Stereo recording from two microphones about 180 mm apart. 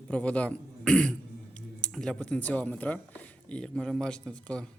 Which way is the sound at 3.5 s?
5° left (ahead or behind).